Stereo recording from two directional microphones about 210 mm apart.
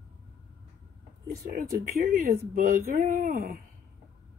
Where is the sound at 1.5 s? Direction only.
40° right (ahead or behind).